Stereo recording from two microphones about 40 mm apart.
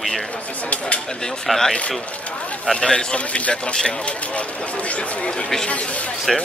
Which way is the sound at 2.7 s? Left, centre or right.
Left.